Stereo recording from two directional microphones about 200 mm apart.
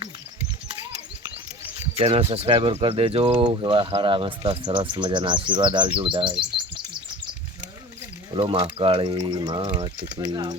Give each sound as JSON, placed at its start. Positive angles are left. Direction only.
{"t": 2.0, "sound": "speech", "side_deg": -30}
{"t": 8.4, "sound": "speech", "side_deg": -25}